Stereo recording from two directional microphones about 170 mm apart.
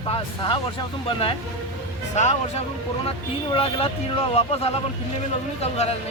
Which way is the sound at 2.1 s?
40° left (ahead or behind).